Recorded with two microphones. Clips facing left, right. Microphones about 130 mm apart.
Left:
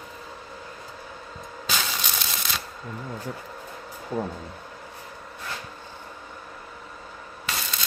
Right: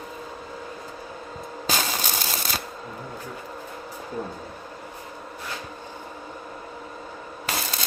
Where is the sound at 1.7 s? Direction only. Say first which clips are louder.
Right 3 dB; 45° right (ahead or behind).